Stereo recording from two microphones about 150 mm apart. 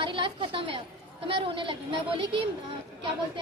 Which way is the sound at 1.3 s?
35° right (ahead or behind).